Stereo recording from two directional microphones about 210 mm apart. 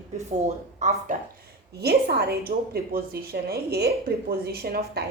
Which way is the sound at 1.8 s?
50° right (ahead or behind).